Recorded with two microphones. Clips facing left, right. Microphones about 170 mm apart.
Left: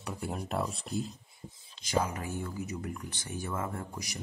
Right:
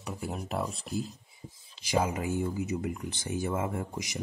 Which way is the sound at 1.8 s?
15° right (ahead or behind).